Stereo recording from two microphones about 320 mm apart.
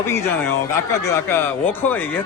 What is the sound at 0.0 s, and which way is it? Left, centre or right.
A man's voice, centre.